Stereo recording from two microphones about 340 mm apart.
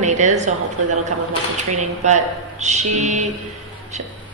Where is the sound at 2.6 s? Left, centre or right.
Centre.